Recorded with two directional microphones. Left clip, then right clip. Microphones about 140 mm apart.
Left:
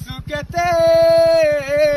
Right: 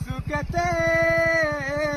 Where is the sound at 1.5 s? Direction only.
15° left (ahead or behind).